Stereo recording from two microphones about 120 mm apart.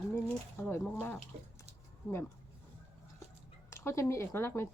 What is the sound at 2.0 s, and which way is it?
Speech, centre (ahead or behind).